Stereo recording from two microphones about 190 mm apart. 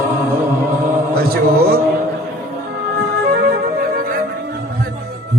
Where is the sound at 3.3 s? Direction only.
55° right (ahead or behind).